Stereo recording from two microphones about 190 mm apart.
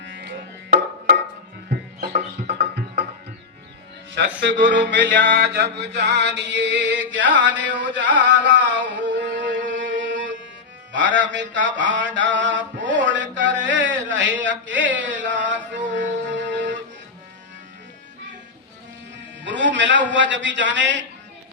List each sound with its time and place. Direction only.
0.0 s music: 65° right (ahead or behind)
1.7 s music: 55° right (ahead or behind)
4.4 s a man's voice: 65° right (ahead or behind)
5.7 s chant: 65° right (ahead or behind)
10.9 s mantra: 70° right (ahead or behind)
14.7 s a sound: 70° right (ahead or behind)
15.9 s music: 70° right (ahead or behind)
19.5 s a man's voice: 70° right (ahead or behind)